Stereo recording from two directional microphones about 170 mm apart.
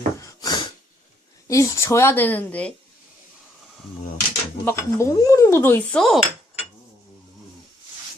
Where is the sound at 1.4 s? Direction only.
15° left (ahead or behind).